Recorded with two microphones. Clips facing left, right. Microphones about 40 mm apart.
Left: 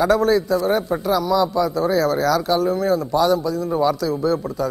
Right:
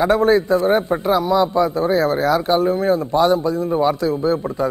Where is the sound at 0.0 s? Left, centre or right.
Right.